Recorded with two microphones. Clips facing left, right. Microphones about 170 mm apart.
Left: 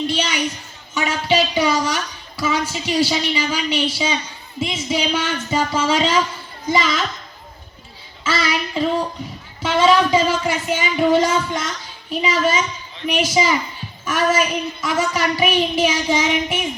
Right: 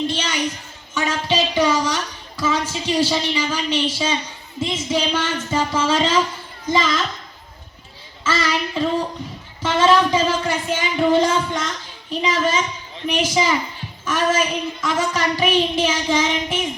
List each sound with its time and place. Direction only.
0.1 s a sound: 10° left (ahead or behind)
0.9 s a woman's voice: 10° left (ahead or behind)
8.2 s a woman's voice: 10° left (ahead or behind)